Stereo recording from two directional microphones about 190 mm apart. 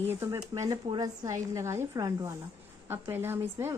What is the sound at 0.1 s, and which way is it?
A woman's voice, 15° right (ahead or behind).